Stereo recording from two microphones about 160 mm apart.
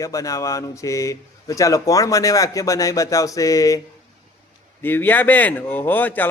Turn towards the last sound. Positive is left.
turn(degrees=10)  # may be behind; listen again after turning